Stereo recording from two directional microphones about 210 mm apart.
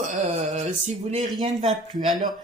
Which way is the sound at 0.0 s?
35° right (ahead or behind).